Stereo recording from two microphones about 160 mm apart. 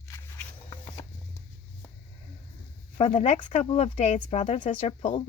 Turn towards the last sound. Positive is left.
turn(degrees=45)  # may be behind; listen again after turning